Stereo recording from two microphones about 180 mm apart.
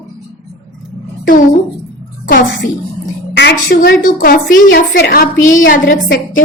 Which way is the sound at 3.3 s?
70° left (ahead or behind).